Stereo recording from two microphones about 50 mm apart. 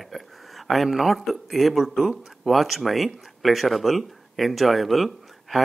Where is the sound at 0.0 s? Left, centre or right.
Centre.